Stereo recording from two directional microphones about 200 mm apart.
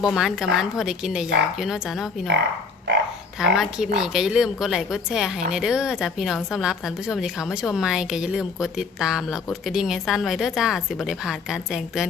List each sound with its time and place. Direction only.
0.0 s speech: centre (ahead or behind)
2.9 s dog: 60° right (ahead or behind)
3.4 s speech: 5° right (ahead or behind)